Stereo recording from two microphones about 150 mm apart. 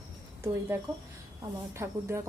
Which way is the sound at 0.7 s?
15° right (ahead or behind).